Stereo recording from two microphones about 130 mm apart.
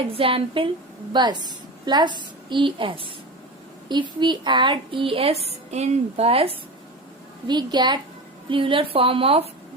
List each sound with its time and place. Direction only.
0.1 s a woman's voice: 45° right (ahead or behind)
7.4 s a woman's voice: 35° right (ahead or behind)